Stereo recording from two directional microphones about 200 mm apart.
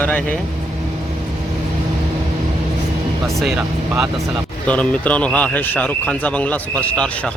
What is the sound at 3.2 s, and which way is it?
A man's voice, centre (ahead or behind).